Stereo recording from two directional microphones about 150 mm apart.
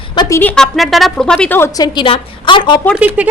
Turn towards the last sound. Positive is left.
turn(degrees=-10)  # may be behind; listen again after turning